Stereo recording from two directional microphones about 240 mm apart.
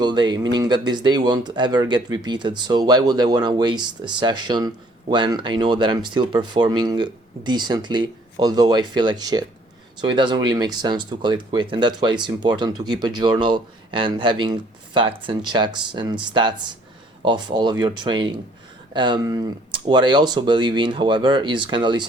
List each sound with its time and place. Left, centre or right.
0.0 s speech: centre